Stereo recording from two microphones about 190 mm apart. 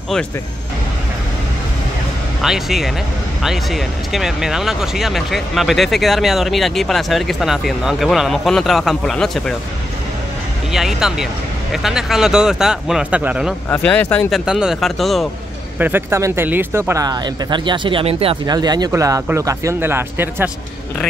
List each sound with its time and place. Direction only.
2.4 s speech: centre (ahead or behind)
10.7 s speech: centre (ahead or behind)
13.7 s speech: 10° left (ahead or behind)
14.3 s speech: 5° right (ahead or behind)
15.8 s speech: 10° right (ahead or behind)